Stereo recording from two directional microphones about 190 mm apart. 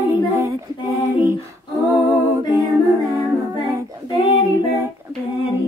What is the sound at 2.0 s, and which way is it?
Humming, 15° right (ahead or behind).